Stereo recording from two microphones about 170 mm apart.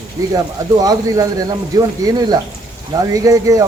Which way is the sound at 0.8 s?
20° right (ahead or behind).